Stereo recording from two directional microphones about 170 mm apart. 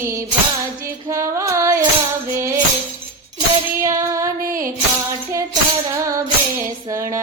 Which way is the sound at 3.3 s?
20° right (ahead or behind).